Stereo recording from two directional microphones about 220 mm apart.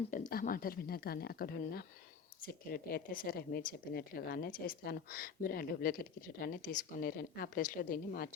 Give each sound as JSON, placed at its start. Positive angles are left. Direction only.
{"t": 0.3, "sound": "a woman's voice", "side_deg": 40}